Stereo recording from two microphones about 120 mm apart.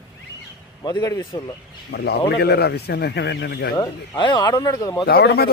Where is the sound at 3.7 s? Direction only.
35° left (ahead or behind).